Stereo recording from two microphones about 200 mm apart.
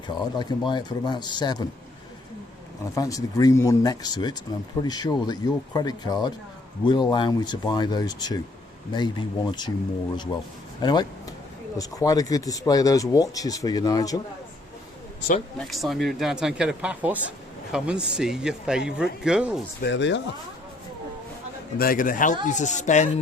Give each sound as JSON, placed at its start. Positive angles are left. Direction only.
{"t": 0.1, "sound": "speech", "side_deg": 20}
{"t": 2.9, "sound": "speech", "side_deg": 15}
{"t": 15.5, "sound": "speech", "side_deg": 0}
{"t": 19.8, "sound": "speech", "side_deg": 60}
{"t": 21.8, "sound": "a man's voice", "side_deg": 45}